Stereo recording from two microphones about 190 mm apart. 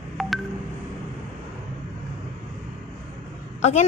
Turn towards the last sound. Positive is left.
turn(degrees=35)  # may be behind; listen again after turning